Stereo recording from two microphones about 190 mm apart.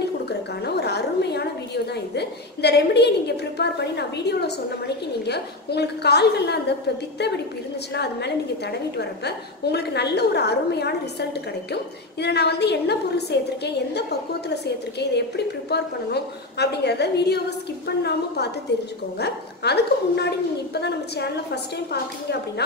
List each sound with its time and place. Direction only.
0.3 s gargling: 60° left (ahead or behind)
2.1 s a woman's voice: 60° left (ahead or behind)
7.9 s a woman's voice: 60° left (ahead or behind)
14.5 s a woman's voice: 60° left (ahead or behind)